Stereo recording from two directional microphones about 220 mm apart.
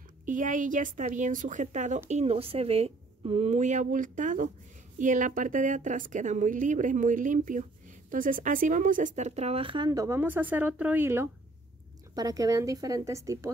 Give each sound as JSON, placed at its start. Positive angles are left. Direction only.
{"t": 0.2, "sound": "a woman's voice", "side_deg": -35}